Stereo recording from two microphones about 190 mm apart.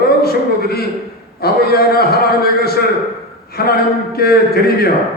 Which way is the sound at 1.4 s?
55° left (ahead or behind).